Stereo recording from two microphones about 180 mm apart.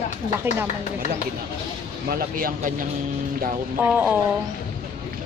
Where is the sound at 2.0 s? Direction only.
55° right (ahead or behind).